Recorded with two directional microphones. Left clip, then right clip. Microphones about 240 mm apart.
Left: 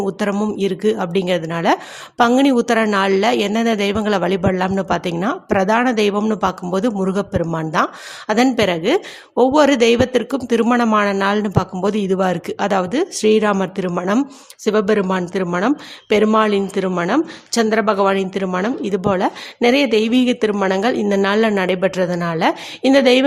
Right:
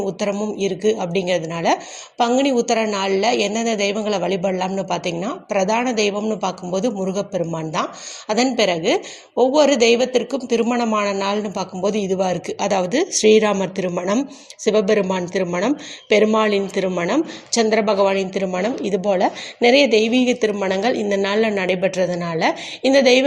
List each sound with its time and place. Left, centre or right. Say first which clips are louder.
0.0 s speech: left 2 dB; left